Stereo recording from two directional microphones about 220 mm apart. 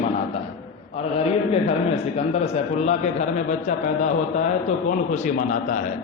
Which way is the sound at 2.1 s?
30° left (ahead or behind).